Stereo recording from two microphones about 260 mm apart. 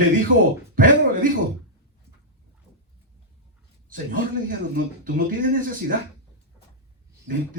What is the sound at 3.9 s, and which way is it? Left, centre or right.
Speech, right.